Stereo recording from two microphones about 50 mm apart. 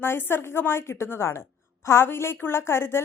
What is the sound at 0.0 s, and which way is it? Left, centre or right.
A woman's voice, left.